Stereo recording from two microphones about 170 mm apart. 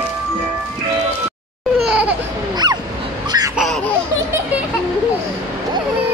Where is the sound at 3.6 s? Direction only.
Centre (ahead or behind).